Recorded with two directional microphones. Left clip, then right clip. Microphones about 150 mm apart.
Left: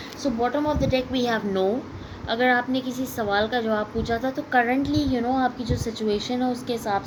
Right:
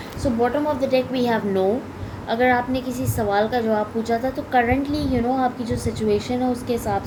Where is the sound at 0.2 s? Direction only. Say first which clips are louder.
Right 3 dB; 45° left (ahead or behind).